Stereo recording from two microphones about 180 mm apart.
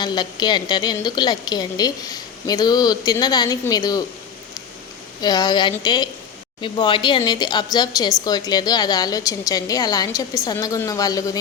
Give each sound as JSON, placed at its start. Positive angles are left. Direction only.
{"t": 0.0, "sound": "a woman's voice", "side_deg": 25}
{"t": 5.2, "sound": "a woman's voice", "side_deg": 20}